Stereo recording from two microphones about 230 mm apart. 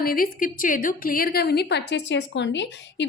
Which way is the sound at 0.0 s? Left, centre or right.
Left.